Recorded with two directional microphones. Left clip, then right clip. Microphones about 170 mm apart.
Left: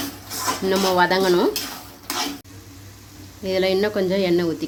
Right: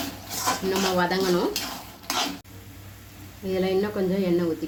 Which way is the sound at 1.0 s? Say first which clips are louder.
Left 6 dB; 45° left (ahead or behind).